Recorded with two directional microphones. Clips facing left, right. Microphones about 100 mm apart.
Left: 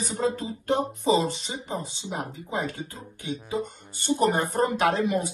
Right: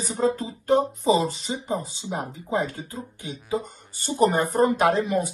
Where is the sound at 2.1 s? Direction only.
35° right (ahead or behind).